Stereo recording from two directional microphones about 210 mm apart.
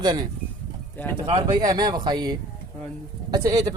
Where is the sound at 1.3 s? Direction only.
20° right (ahead or behind).